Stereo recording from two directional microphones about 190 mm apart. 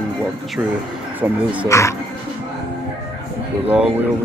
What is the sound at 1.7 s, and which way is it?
Speech, 15° left (ahead or behind).